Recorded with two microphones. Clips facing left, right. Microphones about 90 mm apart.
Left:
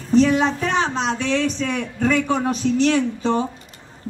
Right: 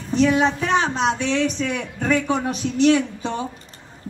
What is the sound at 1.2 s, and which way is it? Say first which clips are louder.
Speech: even; 35° left (ahead or behind).